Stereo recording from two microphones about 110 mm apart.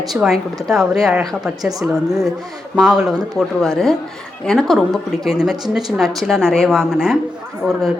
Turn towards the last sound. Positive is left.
turn(degrees=5)  # may be behind; listen again after turning